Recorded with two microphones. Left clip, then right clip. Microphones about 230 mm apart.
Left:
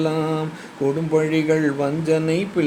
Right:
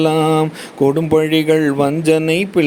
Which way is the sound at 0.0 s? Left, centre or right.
Right.